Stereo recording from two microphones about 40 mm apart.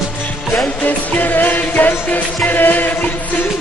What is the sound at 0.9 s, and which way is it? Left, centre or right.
Music, left.